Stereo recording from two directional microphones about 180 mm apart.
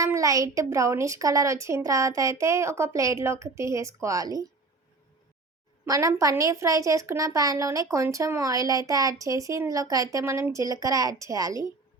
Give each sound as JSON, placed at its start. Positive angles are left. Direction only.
{"t": 0.0, "sound": "a woman's voice", "side_deg": -15}
{"t": 5.8, "sound": "a woman's voice", "side_deg": -20}